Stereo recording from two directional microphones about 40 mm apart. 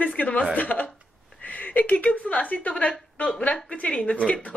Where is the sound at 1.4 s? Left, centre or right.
Left.